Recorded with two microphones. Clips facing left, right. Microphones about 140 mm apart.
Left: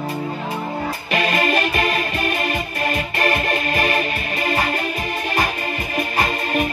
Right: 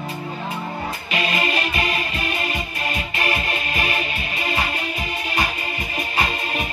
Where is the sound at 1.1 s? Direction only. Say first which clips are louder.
Left 4 dB; 50° left (ahead or behind).